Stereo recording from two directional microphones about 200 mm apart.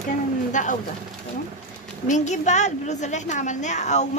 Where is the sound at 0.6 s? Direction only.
40° left (ahead or behind).